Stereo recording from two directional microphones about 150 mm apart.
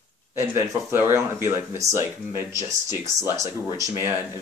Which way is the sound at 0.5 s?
15° right (ahead or behind).